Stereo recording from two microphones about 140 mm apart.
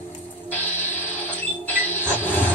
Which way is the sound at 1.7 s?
15° left (ahead or behind).